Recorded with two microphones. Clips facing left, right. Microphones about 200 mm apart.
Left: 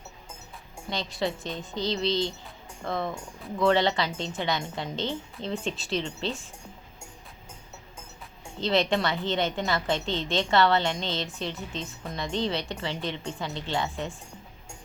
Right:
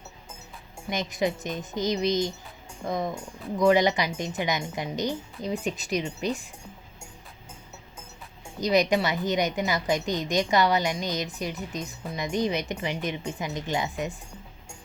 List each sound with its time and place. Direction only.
0.9 s a woman's voice: 15° right (ahead or behind)
8.6 s a woman's voice: 15° right (ahead or behind)